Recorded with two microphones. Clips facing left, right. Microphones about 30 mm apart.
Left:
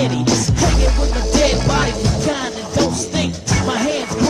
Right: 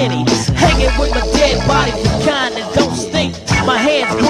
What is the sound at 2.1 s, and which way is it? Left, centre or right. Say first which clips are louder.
Music: right 5 dB; right.